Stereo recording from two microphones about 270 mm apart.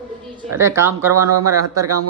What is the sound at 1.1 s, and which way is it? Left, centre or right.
Speech, right.